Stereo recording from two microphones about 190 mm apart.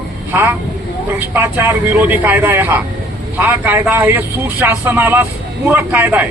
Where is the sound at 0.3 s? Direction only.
10° right (ahead or behind).